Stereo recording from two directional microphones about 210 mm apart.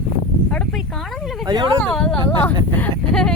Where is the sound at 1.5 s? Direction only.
20° right (ahead or behind).